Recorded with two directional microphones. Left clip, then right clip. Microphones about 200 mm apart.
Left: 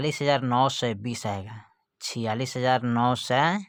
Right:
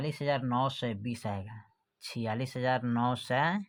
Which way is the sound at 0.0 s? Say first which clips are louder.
Left 8 dB; 40° left (ahead or behind).